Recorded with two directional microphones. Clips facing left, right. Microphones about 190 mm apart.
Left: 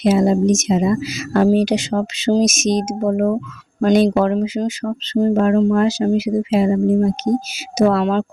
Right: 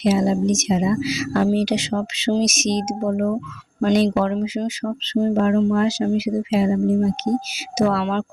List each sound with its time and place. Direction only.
0.0 s speech: 55° left (ahead or behind)